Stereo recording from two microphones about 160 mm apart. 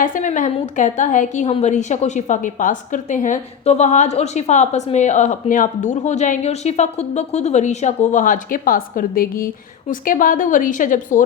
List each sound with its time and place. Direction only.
0.0 s a woman's voice: 55° left (ahead or behind)